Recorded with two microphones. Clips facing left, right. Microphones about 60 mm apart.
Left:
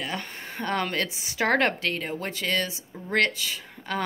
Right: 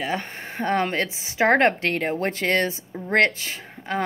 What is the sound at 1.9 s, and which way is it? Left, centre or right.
A woman's voice, right.